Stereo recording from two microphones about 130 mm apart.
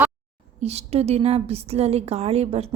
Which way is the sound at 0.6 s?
55° right (ahead or behind).